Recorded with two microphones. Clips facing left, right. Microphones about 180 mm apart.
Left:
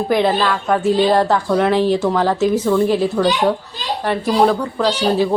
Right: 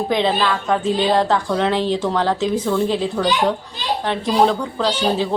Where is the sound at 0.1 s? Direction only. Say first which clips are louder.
Left 4 dB; 10° left (ahead or behind).